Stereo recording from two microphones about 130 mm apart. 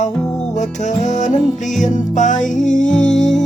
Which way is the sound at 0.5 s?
65° left (ahead or behind).